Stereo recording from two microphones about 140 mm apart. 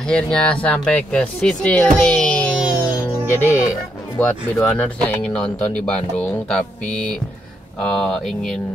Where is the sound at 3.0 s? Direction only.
15° left (ahead or behind).